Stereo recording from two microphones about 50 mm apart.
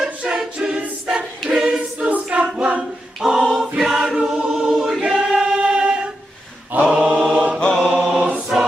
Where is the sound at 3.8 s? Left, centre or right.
Centre.